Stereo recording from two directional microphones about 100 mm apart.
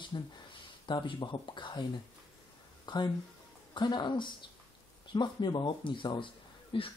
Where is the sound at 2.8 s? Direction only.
45° left (ahead or behind).